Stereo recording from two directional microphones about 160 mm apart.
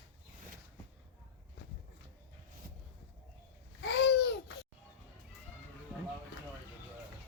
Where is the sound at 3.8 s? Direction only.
90° left.